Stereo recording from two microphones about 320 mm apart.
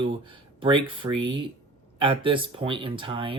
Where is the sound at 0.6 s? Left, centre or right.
Centre.